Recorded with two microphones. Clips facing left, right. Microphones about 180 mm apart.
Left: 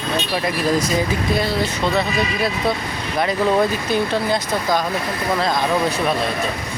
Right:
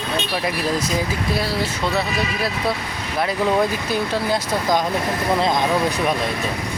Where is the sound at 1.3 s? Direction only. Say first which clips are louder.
Left 2 dB; 5° right (ahead or behind).